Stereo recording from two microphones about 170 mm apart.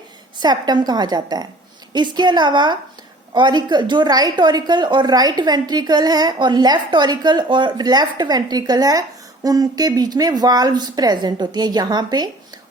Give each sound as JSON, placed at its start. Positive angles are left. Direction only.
{"t": 0.3, "sound": "a woman's voice", "side_deg": -25}